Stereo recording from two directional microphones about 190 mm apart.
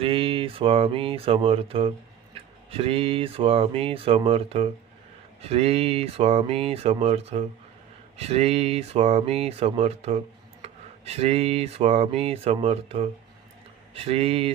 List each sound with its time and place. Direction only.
0.0 s speech: 30° right (ahead or behind)
10.6 s a sound: 30° right (ahead or behind)
13.9 s speech: 30° right (ahead or behind)